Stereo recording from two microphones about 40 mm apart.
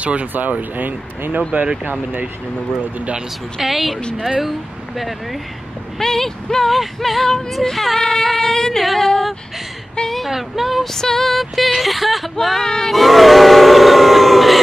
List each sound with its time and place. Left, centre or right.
0.0 s speech: right
0.3 s speech: right
3.6 s speech: centre
5.9 s speech: centre
8.0 s female singing: centre
10.0 s a sound: centre
10.3 s speech: centre
10.9 s speech: centre
12.4 s speech: centre
12.9 s civil defense siren: centre